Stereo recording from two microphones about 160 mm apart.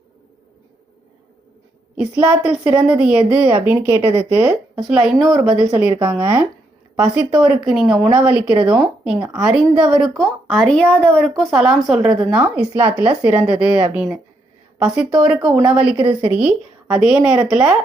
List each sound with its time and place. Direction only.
2.0 s a woman's voice: 5° right (ahead or behind)
16.0 s speech: 35° right (ahead or behind)
16.4 s a woman's voice: 5° right (ahead or behind)